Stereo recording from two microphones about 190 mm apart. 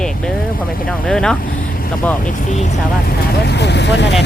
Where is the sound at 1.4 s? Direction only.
50° left (ahead or behind).